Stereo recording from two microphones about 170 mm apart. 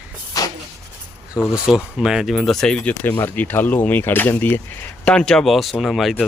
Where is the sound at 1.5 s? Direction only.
5° right (ahead or behind).